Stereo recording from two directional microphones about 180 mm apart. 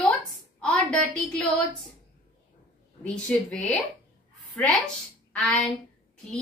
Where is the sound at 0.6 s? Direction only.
Centre (ahead or behind).